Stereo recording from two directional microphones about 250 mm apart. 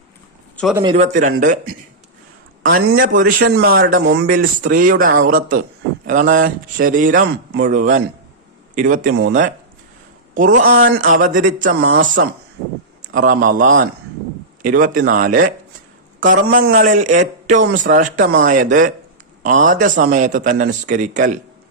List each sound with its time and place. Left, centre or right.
0.5 s a man's voice: centre
0.8 s a man's voice: centre
1.2 s a man's voice: right
10.3 s a man's voice: right
13.0 s a man's voice: right